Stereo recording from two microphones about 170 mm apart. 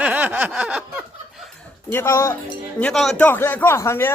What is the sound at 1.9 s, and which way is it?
Speech, 15° left (ahead or behind).